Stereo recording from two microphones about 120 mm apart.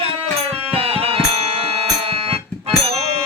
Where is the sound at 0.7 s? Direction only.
55° right (ahead or behind).